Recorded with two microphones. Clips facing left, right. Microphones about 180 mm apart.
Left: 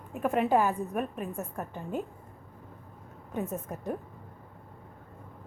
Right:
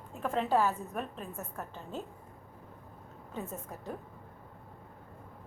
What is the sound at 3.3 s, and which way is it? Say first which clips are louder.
Speech: left 7 dB; 15° left (ahead or behind).